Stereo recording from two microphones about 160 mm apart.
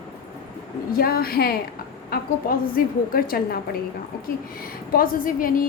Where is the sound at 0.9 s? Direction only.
70° left (ahead or behind).